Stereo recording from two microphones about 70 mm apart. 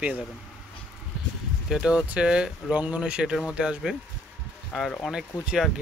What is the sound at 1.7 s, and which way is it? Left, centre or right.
Speech, centre.